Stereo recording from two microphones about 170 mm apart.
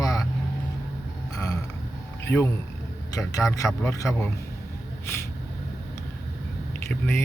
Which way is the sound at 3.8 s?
20° left (ahead or behind).